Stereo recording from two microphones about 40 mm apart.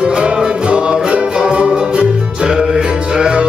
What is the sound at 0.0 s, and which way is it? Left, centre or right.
Music, right.